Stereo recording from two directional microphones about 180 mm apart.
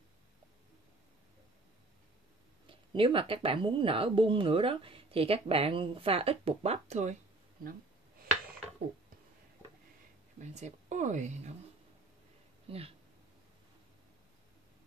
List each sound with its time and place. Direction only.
2.6 s speech: 30° right (ahead or behind)
10.4 s speech: 40° right (ahead or behind)
12.6 s speech: 30° right (ahead or behind)